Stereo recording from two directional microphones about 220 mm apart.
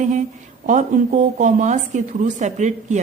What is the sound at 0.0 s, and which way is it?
A woman's voice, 30° right (ahead or behind).